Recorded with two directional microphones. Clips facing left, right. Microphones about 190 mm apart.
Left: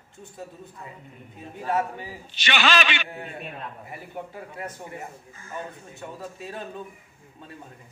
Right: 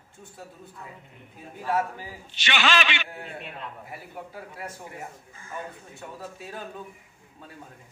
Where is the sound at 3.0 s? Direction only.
Centre (ahead or behind).